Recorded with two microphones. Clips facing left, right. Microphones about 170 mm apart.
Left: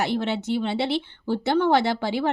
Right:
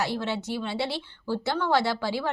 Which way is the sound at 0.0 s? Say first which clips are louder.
Left 4 dB; 20° left (ahead or behind).